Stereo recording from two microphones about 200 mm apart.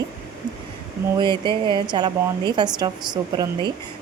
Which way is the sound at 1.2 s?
25° right (ahead or behind).